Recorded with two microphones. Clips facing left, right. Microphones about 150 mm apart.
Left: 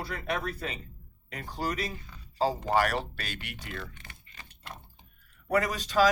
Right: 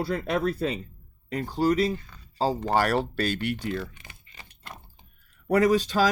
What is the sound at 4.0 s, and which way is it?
Keys jangling, 15° right (ahead or behind).